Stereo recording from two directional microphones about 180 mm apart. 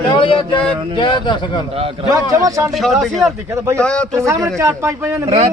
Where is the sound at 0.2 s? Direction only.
30° left (ahead or behind).